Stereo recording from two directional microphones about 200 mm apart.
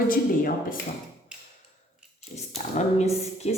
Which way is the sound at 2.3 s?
35° left (ahead or behind).